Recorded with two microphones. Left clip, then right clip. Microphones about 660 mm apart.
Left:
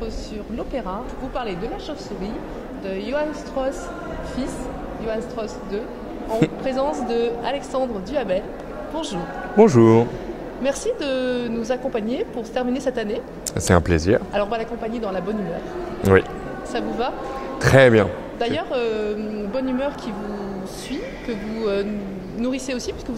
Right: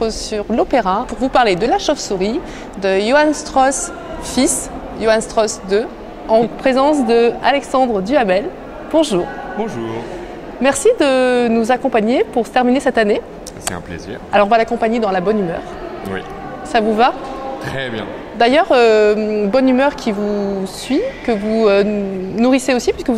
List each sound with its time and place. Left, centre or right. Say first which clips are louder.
0.0 s a woman's voice: right 12 dB; right
9.6 s speech: left 12 dB; left
10.6 s a woman's voice: right 11 dB; right
13.7 s speech: left 10 dB; left
14.3 s a woman's voice: right 11 dB; right
16.7 s speech: right 12 dB; right
17.6 s speech: left 14 dB; left
18.4 s a woman's voice: right 13 dB; right